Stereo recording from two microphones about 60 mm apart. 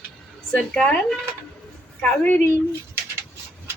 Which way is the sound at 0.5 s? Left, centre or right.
Centre.